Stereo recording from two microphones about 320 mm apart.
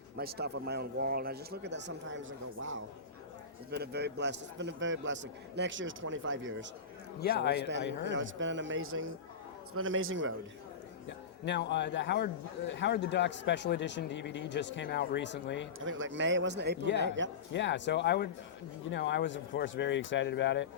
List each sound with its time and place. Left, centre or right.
0.2 s a man's voice: right
7.2 s a man's voice: left
8.0 s a man's voice: right
11.4 s a man's voice: left
15.8 s a man's voice: right
17.5 s a man's voice: left